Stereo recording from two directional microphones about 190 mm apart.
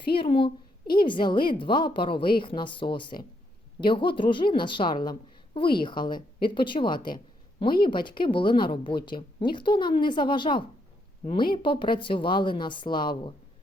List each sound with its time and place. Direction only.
0.2 s a woman's voice: 25° left (ahead or behind)